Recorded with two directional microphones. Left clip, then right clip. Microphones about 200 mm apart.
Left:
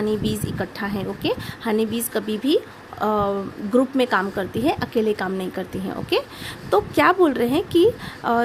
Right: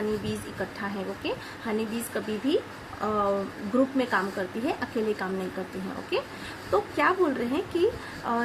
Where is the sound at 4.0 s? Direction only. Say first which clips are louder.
Left 6 dB; 60° left (ahead or behind).